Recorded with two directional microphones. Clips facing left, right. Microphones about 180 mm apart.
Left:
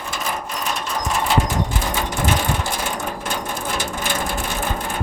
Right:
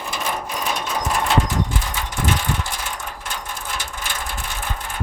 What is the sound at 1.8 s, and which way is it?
Mechanisms, 45° left (ahead or behind).